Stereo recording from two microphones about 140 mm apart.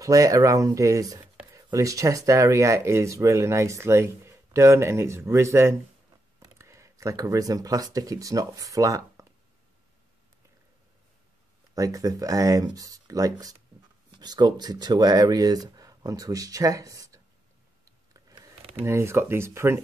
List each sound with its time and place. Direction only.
0.0 s speech: 25° right (ahead or behind)
11.7 s speech: 25° right (ahead or behind)
18.8 s speech: 20° right (ahead or behind)